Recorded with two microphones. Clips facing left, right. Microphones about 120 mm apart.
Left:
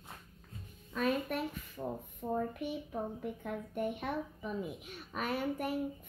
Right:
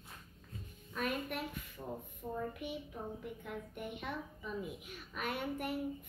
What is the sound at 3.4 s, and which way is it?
A woman's voice, 45° left (ahead or behind).